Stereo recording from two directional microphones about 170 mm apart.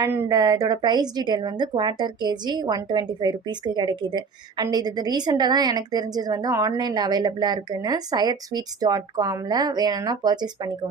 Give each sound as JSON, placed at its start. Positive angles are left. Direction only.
{"t": 0.0, "sound": "a woman's voice", "side_deg": -20}